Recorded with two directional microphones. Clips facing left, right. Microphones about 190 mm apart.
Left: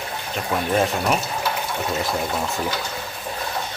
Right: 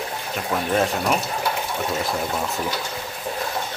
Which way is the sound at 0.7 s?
Centre (ahead or behind).